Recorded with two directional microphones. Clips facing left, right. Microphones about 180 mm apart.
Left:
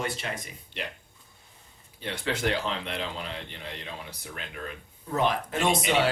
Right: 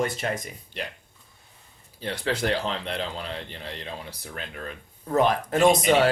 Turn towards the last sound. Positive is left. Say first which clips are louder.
# right 7 dB
turn(degrees=-40)  # may be behind; listen again after turning